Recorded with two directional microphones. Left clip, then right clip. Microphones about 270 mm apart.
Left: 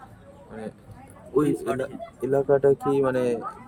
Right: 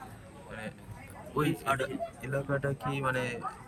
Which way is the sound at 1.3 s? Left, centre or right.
Left.